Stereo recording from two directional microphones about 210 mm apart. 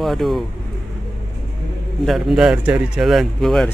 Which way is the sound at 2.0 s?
Centre (ahead or behind).